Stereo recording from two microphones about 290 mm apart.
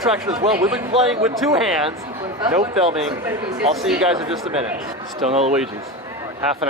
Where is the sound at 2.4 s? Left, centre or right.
Right.